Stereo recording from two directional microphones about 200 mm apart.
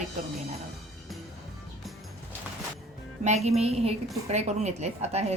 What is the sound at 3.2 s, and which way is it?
A woman's voice, 35° right (ahead or behind).